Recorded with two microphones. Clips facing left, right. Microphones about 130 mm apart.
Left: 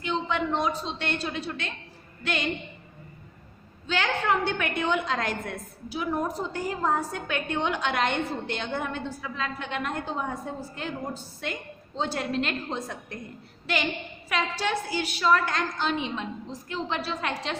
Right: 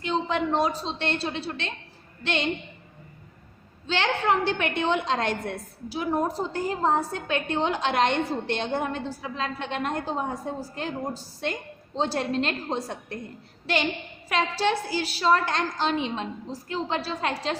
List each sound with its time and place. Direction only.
0.0 s a woman's voice: 35° right (ahead or behind)
3.8 s a woman's voice: 30° right (ahead or behind)
14.3 s a woman's voice: 35° right (ahead or behind)